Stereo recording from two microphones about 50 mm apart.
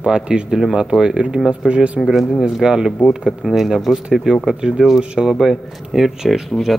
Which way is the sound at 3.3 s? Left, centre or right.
Centre.